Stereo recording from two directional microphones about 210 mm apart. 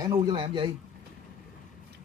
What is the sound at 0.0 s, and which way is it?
Speech, 15° right (ahead or behind).